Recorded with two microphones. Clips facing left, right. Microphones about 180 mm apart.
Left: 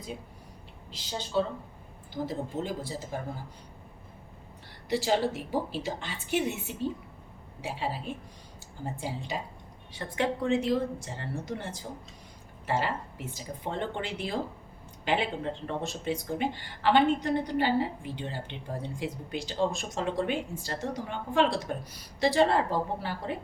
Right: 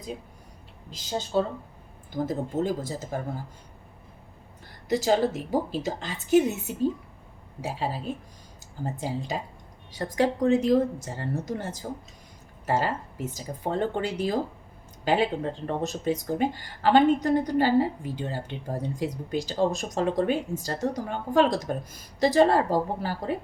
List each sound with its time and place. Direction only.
0.9 s speech: 45° right (ahead or behind)
4.9 s speech: 40° right (ahead or behind)
9.9 s speech: 40° right (ahead or behind)